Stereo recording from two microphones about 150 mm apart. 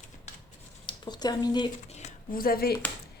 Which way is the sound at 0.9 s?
30° left (ahead or behind).